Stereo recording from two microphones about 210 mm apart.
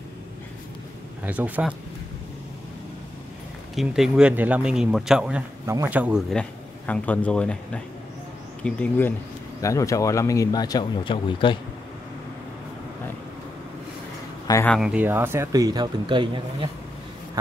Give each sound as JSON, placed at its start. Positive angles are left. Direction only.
{"t": 1.2, "sound": "speech", "side_deg": -10}
{"t": 3.7, "sound": "speech", "side_deg": 0}
{"t": 6.9, "sound": "speech", "side_deg": 5}
{"t": 14.5, "sound": "speech", "side_deg": 10}
{"t": 14.8, "sound": "speech", "side_deg": -5}